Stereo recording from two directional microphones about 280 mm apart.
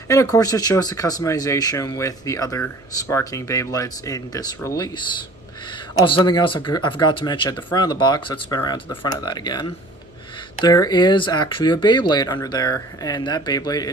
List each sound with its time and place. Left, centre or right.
0.1 s speech: centre